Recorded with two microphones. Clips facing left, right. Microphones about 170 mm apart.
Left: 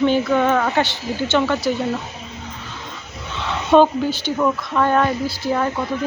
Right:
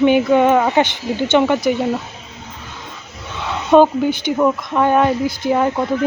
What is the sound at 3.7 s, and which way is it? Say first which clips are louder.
Speech: right 3 dB; 15° right (ahead or behind).